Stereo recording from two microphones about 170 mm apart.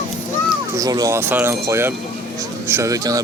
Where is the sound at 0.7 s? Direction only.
20° right (ahead or behind).